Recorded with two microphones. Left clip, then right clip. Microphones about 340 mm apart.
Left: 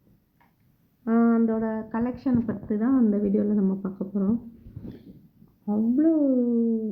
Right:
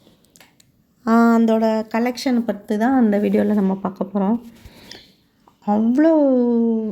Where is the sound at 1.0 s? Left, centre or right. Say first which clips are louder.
Right 7 dB; centre.